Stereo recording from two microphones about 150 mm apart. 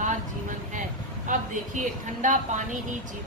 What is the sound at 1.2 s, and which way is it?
A man's voice, 60° right (ahead or behind).